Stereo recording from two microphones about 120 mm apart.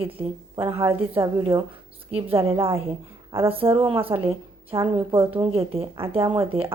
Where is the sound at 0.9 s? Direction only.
55° right (ahead or behind).